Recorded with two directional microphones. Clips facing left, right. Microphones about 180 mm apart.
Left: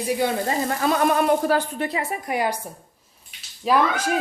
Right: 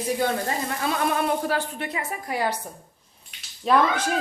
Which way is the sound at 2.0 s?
15° left (ahead or behind).